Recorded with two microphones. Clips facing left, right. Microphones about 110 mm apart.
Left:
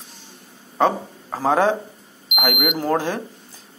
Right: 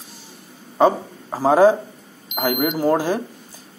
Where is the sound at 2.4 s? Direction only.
35° right (ahead or behind).